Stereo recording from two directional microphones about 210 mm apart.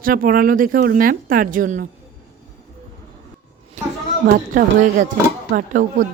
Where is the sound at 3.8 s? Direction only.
35° right (ahead or behind).